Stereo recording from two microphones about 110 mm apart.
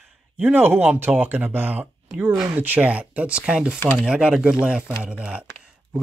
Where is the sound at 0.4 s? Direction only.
15° right (ahead or behind).